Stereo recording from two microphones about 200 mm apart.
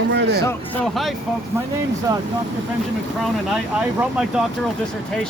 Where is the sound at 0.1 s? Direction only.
60° right (ahead or behind).